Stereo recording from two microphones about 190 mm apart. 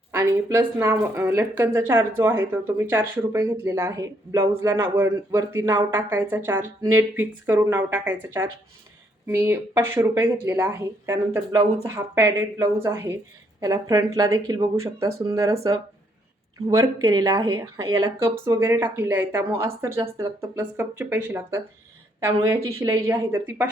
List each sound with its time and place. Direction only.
0.1 s speech: 15° right (ahead or behind)
16.6 s speech: 15° right (ahead or behind)